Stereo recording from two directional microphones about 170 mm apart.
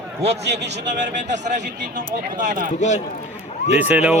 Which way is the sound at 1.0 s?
50° right (ahead or behind).